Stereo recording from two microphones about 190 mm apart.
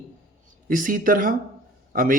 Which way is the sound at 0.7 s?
45° right (ahead or behind).